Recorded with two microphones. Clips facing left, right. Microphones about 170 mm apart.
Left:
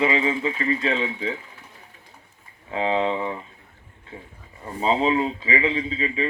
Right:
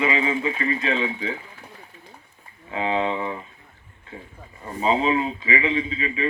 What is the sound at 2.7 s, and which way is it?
Speech, 30° left (ahead or behind).